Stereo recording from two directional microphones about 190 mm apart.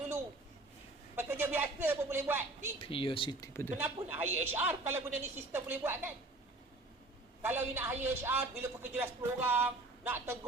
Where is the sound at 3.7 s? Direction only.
10° right (ahead or behind).